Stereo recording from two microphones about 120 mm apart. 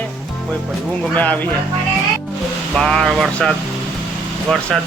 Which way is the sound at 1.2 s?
15° left (ahead or behind).